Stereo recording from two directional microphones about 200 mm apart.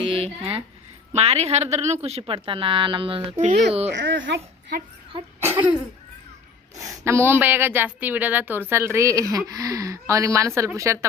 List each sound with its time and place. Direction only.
0.0 s a sound: 25° right (ahead or behind)
1.1 s a woman's voice: 30° right (ahead or behind)
3.9 s speech: 65° right (ahead or behind)
5.1 s speech: 25° right (ahead or behind)
5.5 s cough: 10° right (ahead or behind)
6.7 s a woman's voice: 15° right (ahead or behind)